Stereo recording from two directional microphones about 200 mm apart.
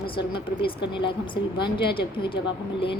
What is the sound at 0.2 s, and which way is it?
A woman's voice, 25° left (ahead or behind).